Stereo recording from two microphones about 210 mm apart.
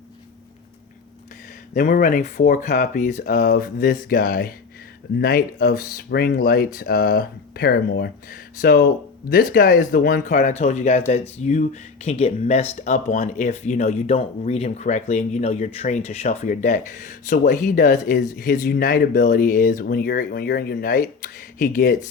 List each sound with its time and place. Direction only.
1.7 s speech: 40° left (ahead or behind)